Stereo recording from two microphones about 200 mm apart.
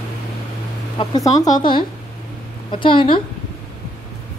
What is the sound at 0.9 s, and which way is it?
Speech, 20° left (ahead or behind).